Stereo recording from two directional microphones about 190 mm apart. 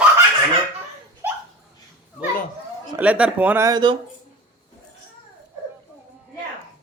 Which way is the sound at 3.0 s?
5° right (ahead or behind).